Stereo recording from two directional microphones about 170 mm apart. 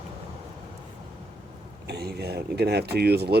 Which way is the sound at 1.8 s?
70° right (ahead or behind).